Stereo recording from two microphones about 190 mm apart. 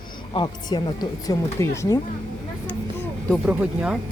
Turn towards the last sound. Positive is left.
turn(degrees=-5)  # may be behind; listen again after turning